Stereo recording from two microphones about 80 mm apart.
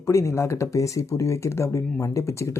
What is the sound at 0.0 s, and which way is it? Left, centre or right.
Speech, left.